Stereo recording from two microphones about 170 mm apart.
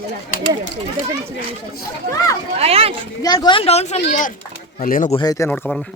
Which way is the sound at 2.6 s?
35° right (ahead or behind).